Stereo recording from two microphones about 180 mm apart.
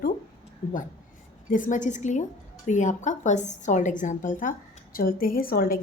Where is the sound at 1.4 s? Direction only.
45° left (ahead or behind).